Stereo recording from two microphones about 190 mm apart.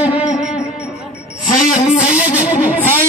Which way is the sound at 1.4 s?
40° left (ahead or behind).